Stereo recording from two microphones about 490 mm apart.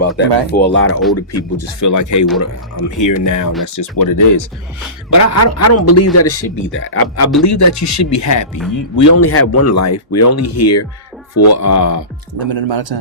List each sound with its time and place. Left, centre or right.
0.2 s speech: left
7.4 s speech: left
12.3 s speech: right